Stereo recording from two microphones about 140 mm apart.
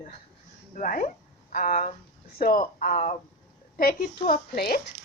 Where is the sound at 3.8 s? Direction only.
90° left.